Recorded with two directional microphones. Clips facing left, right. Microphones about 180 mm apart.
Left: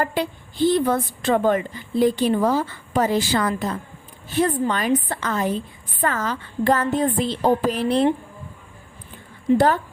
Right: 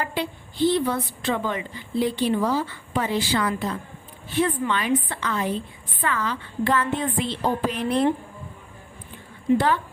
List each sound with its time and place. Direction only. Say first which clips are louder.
0.0 s a woman's voice: left 4 dB; 45° left (ahead or behind)
9.6 s a woman's voice: left 4 dB; 45° left (ahead or behind)